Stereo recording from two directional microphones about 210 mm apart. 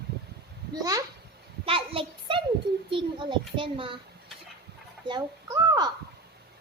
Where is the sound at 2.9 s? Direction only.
25° right (ahead or behind).